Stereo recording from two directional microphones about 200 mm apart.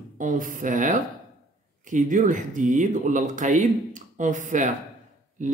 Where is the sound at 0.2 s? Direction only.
40° right (ahead or behind).